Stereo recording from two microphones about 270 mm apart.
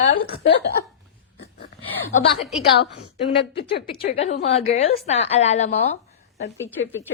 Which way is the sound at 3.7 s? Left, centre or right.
Left.